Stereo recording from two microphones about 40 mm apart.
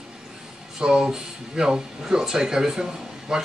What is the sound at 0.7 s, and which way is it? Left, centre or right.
Speech, centre.